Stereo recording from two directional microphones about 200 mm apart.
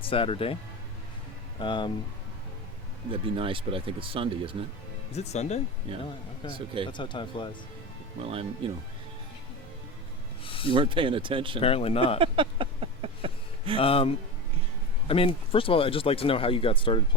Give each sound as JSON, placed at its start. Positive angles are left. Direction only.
{"t": 0.0, "sound": "speech", "side_deg": 25}
{"t": 1.5, "sound": "speech", "side_deg": 25}
{"t": 3.1, "sound": "speech", "side_deg": -25}
{"t": 5.1, "sound": "speech", "side_deg": 35}
{"t": 6.9, "sound": "speech", "side_deg": 25}
{"t": 8.3, "sound": "speech", "side_deg": -30}
{"t": 10.4, "sound": "a sound", "side_deg": 25}
{"t": 10.8, "sound": "speech", "side_deg": -25}
{"t": 11.6, "sound": "speech", "side_deg": 30}
{"t": 12.2, "sound": "a sound", "side_deg": -25}
{"t": 13.7, "sound": "speech", "side_deg": 30}